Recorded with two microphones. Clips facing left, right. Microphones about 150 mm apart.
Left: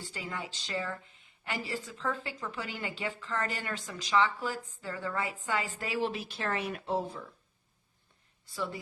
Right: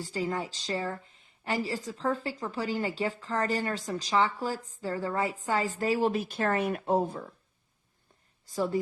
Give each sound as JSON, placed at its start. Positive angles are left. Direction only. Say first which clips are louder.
{"t": 0.0, "sound": "a woman's voice", "louder": "right 8 dB", "side_deg": -40}
{"t": 8.4, "sound": "a woman's voice", "louder": "right 8 dB", "side_deg": -45}